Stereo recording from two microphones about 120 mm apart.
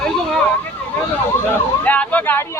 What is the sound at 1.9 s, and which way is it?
Vehicle, 15° left (ahead or behind).